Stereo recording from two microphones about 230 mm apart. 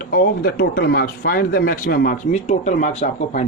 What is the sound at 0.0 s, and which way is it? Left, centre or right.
Speech, left.